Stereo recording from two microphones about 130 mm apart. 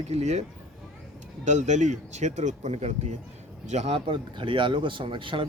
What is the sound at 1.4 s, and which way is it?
Speech, 65° right (ahead or behind).